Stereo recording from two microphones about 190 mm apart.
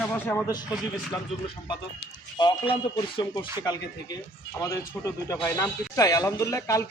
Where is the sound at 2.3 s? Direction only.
25° left (ahead or behind).